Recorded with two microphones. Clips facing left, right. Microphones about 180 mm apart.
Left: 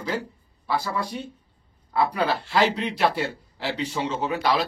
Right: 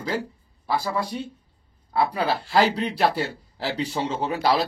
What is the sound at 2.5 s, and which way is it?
Speech, 40° right (ahead or behind).